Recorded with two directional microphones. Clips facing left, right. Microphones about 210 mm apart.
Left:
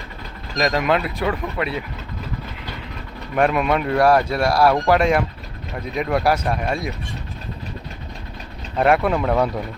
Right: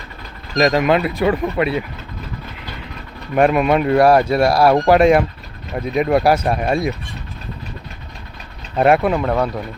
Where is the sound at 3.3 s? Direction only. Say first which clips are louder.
Right 4 dB; 10° right (ahead or behind); by 4.9 s 25° right (ahead or behind).